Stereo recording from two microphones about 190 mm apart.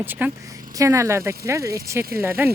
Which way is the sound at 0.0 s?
10° right (ahead or behind).